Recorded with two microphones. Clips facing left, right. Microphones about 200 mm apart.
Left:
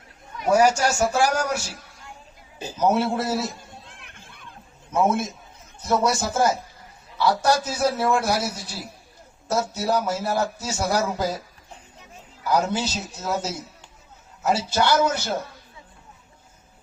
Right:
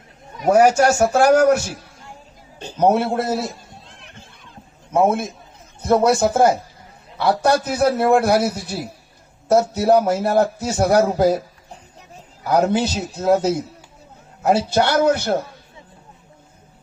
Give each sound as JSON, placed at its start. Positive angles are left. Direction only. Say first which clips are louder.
{"t": 0.5, "sound": "a man's voice", "louder": "right 5 dB", "side_deg": -55}
{"t": 2.8, "sound": "a man's voice", "louder": "right 4 dB", "side_deg": -55}
{"t": 3.8, "sound": "a sound", "louder": "right 3 dB", "side_deg": 55}
{"t": 4.9, "sound": "a man's voice", "louder": "right 4 dB", "side_deg": -60}
{"t": 12.5, "sound": "a man's voice", "louder": "right 6 dB", "side_deg": -55}